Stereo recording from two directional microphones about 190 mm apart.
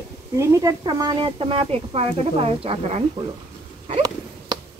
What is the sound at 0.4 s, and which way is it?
Speech, 15° right (ahead or behind).